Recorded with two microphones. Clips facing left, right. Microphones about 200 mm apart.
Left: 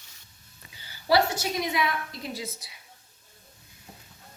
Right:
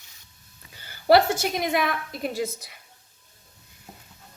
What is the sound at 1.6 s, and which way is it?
A woman's voice, 55° right (ahead or behind).